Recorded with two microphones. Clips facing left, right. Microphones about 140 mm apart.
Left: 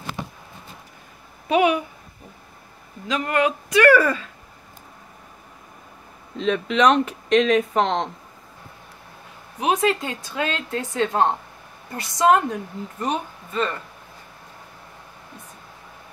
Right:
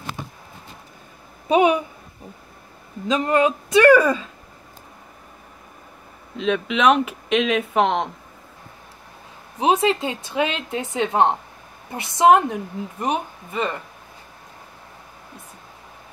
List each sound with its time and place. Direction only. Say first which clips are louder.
1.5 s speech: right 2 dB; 25° right (ahead or behind)
3.1 s speech: right 3 dB; 25° right (ahead or behind)
6.3 s speech: even; centre (ahead or behind)
9.6 s speech: right 2 dB; 25° right (ahead or behind)